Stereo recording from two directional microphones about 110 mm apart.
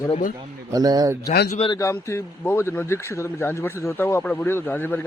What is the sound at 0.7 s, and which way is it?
Speech, 35° right (ahead or behind).